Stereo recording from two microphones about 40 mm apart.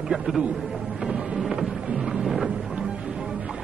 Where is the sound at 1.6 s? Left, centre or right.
Centre.